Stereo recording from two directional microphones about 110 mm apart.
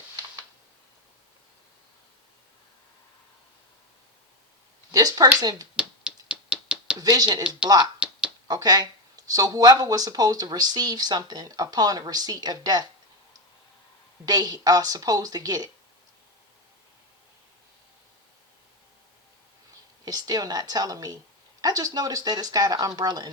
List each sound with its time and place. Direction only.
4.9 s speech: 35° right (ahead or behind)
5.7 s a sound: 10° right (ahead or behind)
7.0 s speech: 40° right (ahead or behind)
7.9 s a sound: 10° right (ahead or behind)
8.4 s speech: 35° right (ahead or behind)
14.3 s speech: 35° right (ahead or behind)
20.1 s speech: 35° right (ahead or behind)